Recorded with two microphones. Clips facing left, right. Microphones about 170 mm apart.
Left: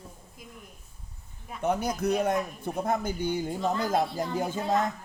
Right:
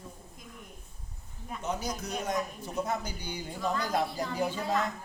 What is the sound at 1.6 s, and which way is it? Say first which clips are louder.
A man's voice: left 7 dB; 60° left (ahead or behind).